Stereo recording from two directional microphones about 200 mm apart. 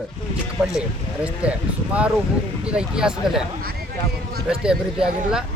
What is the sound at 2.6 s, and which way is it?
Speech, 5° right (ahead or behind).